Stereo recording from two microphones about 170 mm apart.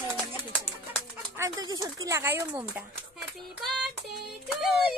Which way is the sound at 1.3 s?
20° right (ahead or behind).